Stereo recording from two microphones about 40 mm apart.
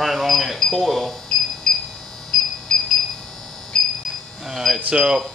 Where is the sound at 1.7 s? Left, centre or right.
Centre.